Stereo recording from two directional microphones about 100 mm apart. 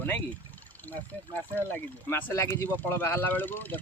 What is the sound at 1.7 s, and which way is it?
Speech, 20° left (ahead or behind).